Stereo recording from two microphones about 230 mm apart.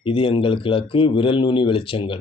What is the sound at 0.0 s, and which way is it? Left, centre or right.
Speech, left.